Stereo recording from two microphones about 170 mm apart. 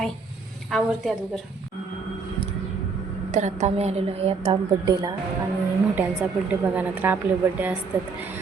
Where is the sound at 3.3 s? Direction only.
40° right (ahead or behind).